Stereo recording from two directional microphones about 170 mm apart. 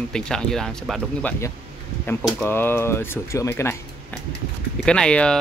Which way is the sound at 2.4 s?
15° left (ahead or behind).